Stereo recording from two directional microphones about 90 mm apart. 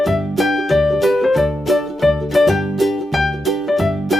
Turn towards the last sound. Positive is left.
turn(degrees=0)  # may be behind; listen again after turning